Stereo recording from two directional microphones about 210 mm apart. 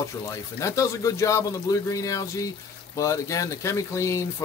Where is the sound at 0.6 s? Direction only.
15° left (ahead or behind).